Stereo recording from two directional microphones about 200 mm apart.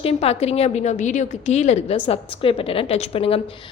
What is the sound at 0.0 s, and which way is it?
A woman's voice, 30° left (ahead or behind).